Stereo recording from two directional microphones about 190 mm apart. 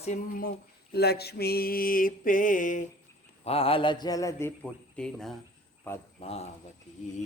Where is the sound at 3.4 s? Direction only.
30° left (ahead or behind); by 4.5 s 15° left (ahead or behind).